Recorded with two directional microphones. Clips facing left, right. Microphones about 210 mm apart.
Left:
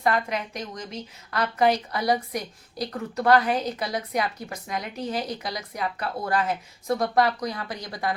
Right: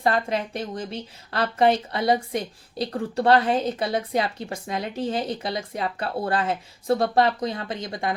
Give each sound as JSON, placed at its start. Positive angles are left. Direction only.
{"t": 0.0, "sound": "a woman's voice", "side_deg": -30}